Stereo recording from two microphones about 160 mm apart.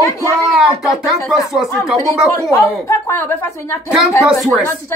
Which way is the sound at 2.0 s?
20° left (ahead or behind).